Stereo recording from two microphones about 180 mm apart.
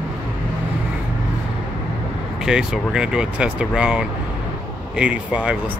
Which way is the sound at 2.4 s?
5° right (ahead or behind).